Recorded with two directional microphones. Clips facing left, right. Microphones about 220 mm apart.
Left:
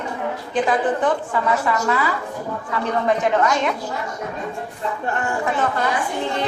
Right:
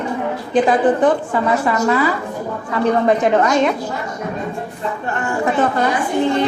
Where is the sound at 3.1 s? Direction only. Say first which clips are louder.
Right 4 dB; 35° right (ahead or behind).